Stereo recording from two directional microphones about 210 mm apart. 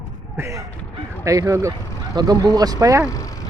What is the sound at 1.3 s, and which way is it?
A man's voice, 15° right (ahead or behind).